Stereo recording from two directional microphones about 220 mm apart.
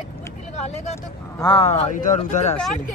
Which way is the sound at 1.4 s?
20° left (ahead or behind).